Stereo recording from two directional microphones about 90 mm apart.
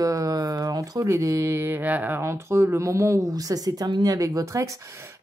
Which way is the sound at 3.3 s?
45° right (ahead or behind).